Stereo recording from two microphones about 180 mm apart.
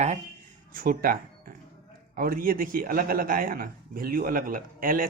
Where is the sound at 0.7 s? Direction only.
50° right (ahead or behind).